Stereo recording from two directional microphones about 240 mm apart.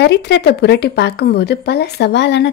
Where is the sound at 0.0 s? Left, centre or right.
Left.